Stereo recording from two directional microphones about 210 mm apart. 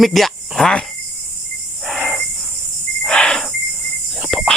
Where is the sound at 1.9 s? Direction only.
Centre (ahead or behind).